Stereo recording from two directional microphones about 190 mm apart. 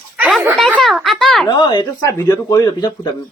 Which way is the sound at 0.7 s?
Centre (ahead or behind).